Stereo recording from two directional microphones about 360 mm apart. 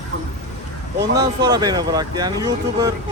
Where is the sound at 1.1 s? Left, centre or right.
Centre.